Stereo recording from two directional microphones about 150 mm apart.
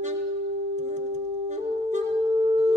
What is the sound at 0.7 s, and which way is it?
Saxophone, 50° right (ahead or behind).